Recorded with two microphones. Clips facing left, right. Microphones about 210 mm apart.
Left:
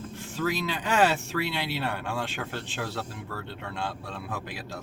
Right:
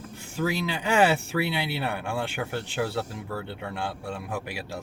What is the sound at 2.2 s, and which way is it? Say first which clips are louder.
Speech: right 3 dB; 15° right (ahead or behind).